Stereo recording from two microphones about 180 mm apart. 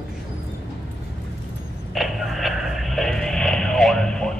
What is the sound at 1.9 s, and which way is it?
Radio, centre (ahead or behind).